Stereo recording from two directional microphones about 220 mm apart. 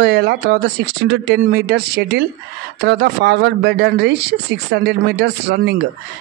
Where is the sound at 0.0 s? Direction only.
50° right (ahead or behind).